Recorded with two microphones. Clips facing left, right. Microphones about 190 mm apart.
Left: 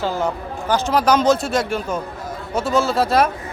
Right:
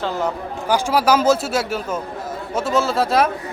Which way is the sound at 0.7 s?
10° right (ahead or behind).